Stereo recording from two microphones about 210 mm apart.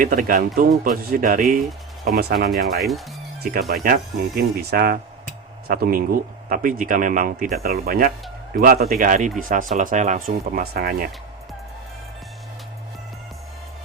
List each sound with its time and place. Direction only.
0.0 s speech: 40° right (ahead or behind)
3.8 s speech: 45° right (ahead or behind)